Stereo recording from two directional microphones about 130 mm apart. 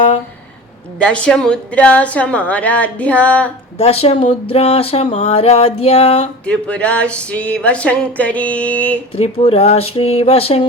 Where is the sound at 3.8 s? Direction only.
50° left (ahead or behind).